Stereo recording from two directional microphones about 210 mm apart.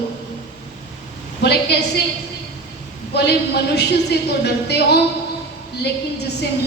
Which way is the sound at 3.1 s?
50° left (ahead or behind).